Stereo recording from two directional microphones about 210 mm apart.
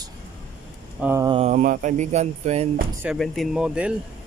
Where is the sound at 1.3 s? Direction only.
30° right (ahead or behind).